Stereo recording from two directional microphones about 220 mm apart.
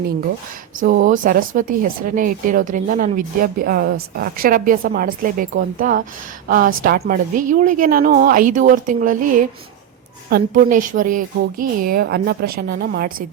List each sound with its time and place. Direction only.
1.0 s speech: 35° right (ahead or behind)